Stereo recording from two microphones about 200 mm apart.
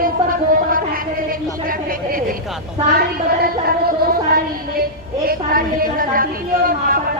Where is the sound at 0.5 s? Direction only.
45° right (ahead or behind).